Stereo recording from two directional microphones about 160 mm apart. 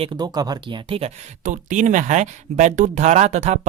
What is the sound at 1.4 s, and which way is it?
Speech, 50° right (ahead or behind).